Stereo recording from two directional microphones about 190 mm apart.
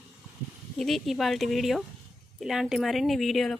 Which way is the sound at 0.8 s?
Centre (ahead or behind).